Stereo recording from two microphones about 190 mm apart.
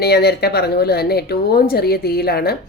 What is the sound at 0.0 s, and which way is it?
A woman's voice, 55° left (ahead or behind).